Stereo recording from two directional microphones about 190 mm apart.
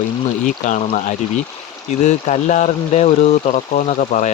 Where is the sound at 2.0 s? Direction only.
40° left (ahead or behind).